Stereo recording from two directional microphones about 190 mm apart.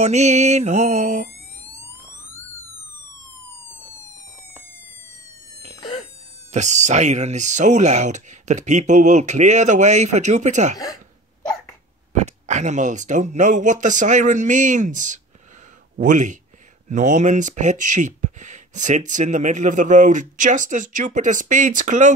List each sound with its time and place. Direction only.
0.0 s speech: 35° right (ahead or behind)
6.5 s speech: 40° right (ahead or behind)
12.1 s speech: 40° right (ahead or behind)